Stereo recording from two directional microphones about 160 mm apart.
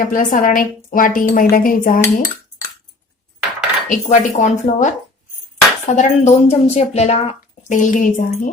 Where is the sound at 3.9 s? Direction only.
50° left (ahead or behind).